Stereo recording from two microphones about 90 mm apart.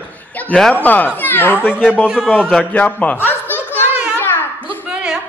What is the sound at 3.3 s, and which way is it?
Snicker, 20° left (ahead or behind).